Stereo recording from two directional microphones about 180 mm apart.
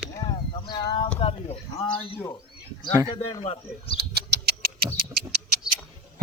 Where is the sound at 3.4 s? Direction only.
35° left (ahead or behind).